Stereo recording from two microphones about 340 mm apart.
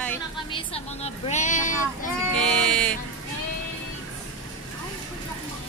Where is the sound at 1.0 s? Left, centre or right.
Centre.